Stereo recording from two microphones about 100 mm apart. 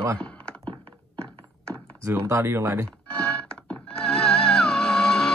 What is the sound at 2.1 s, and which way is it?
Speech, 25° right (ahead or behind).